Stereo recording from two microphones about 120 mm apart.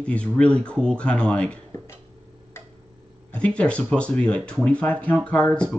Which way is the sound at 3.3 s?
10° left (ahead or behind).